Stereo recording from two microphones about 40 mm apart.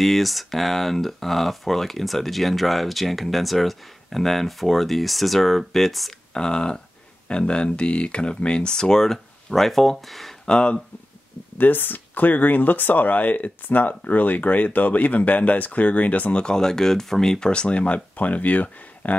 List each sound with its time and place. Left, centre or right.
0.0 s speech: centre
6.3 s speech: left; by 10.3 s centre
10.4 s speech: left
11.5 s speech: left
16.3 s speech: centre
17.5 s speech: left